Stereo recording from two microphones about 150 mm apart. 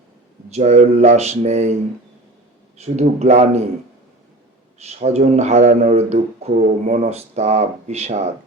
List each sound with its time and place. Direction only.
0.5 s speech: 45° right (ahead or behind)
2.7 s speech: 45° right (ahead or behind)
4.8 s speech: 45° right (ahead or behind)